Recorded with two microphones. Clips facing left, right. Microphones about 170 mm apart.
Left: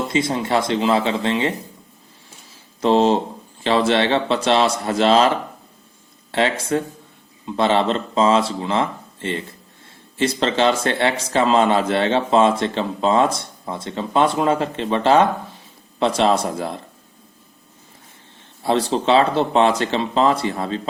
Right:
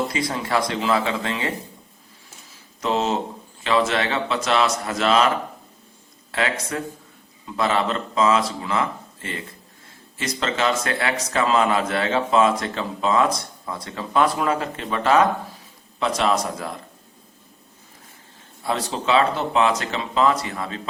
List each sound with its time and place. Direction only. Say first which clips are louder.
0.1 s a man's voice: left 4 dB; 25° left (ahead or behind)
2.8 s speech: left 7 dB; 30° left (ahead or behind)
6.3 s a man's voice: left 6 dB; 30° left (ahead or behind)
18.6 s speech: left 6 dB; 30° left (ahead or behind)